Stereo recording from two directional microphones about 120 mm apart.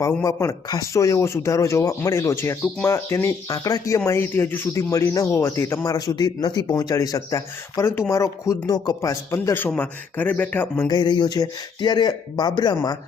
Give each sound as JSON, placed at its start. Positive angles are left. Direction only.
{"t": 0.0, "sound": "speech", "side_deg": 25}
{"t": 10.8, "sound": "speech", "side_deg": 35}